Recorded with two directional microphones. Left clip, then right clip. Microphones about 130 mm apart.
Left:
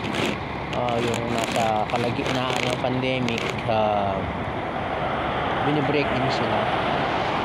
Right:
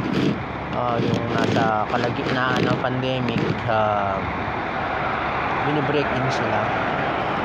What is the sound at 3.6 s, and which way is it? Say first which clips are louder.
Speech: right 1 dB; 20° left (ahead or behind).